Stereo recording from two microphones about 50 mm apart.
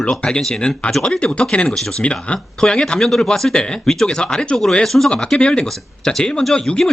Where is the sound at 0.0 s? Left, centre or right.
Centre.